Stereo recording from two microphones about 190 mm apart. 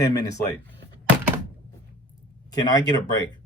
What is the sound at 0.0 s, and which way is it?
Speech, 20° left (ahead or behind).